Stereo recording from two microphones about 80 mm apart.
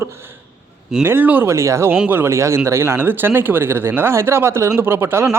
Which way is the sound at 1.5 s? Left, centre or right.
Right.